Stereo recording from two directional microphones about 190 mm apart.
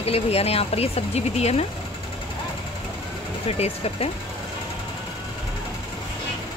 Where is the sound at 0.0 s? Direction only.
30° left (ahead or behind).